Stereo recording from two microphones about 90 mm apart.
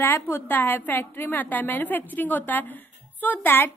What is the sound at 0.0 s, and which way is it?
A woman's voice, 25° left (ahead or behind).